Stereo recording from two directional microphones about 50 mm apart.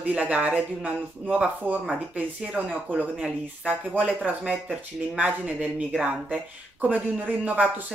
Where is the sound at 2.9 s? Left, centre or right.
Right.